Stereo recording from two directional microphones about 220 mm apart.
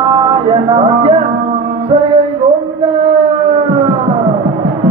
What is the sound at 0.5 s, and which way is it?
Music, 25° right (ahead or behind).